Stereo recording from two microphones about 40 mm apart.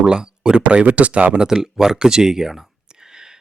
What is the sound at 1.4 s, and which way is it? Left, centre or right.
Speech, centre.